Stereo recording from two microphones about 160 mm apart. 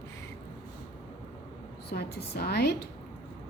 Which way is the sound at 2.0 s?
80° left.